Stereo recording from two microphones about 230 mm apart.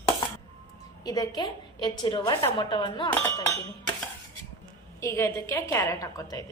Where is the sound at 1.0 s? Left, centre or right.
Centre.